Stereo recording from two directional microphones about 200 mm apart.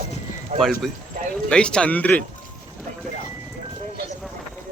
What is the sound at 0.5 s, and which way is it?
Speech, 35° right (ahead or behind).